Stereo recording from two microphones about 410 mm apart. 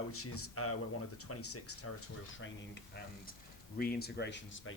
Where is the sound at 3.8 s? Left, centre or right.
Left.